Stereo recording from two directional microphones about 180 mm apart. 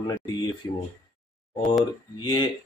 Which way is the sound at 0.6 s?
20° left (ahead or behind).